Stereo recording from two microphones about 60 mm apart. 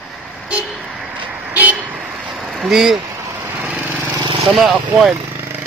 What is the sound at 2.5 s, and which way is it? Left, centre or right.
Speech, centre.